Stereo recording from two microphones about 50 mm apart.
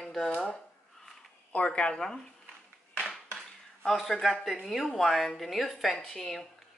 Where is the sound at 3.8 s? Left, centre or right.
Centre.